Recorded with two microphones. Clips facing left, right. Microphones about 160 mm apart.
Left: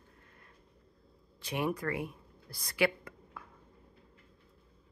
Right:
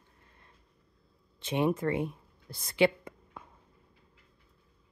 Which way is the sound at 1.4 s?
25° right (ahead or behind).